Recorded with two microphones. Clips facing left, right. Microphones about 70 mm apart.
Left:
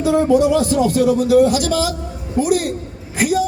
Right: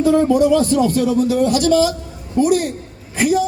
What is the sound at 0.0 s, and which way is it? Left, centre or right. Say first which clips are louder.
A man's voice: right 1 dB; centre.